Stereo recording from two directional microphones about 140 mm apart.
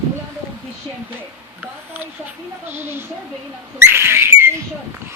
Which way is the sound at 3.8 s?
15° right (ahead or behind).